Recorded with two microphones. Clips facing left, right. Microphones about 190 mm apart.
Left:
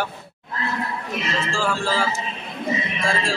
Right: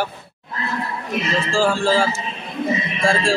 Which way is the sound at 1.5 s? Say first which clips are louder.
Right 7 dB; 30° right (ahead or behind).